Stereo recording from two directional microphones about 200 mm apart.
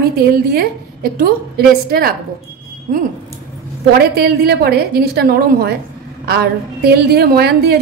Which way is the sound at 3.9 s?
50° right (ahead or behind).